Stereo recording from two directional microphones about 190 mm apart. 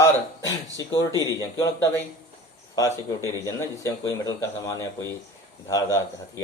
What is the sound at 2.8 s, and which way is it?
Speech, 15° left (ahead or behind).